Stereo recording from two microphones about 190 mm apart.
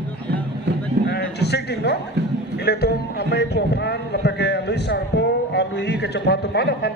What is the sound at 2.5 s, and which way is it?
A man's voice, 55° left (ahead or behind).